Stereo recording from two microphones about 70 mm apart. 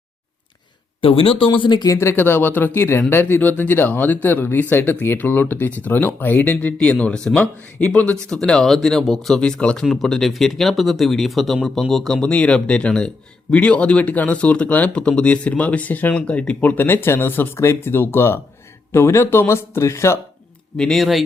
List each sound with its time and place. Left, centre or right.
1.7 s speech: left
2.0 s speech: left
6.7 s speech: centre
8.3 s speech: centre
9.4 s speech: centre
9.8 s speech: centre; by 20.1 s left
20.7 s speech: centre